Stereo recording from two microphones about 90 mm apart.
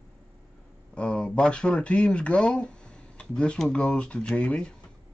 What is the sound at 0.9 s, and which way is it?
Speech, 10° left (ahead or behind).